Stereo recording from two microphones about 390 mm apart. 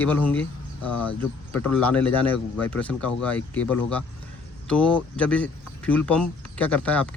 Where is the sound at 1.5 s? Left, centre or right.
Centre.